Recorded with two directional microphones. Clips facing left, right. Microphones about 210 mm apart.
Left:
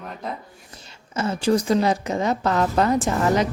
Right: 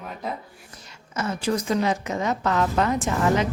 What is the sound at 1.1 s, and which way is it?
A woman's voice, 30° left (ahead or behind).